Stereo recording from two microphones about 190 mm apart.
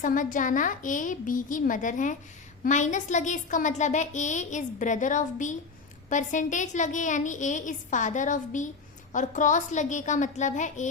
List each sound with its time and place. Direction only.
0.0 s a woman's voice: 45° left (ahead or behind)